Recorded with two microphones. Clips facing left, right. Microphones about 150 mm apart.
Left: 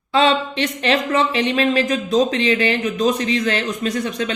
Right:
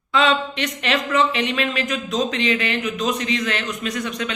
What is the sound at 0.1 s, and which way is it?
Speech, 30° left (ahead or behind).